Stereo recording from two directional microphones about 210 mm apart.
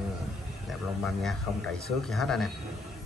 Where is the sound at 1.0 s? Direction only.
Centre (ahead or behind).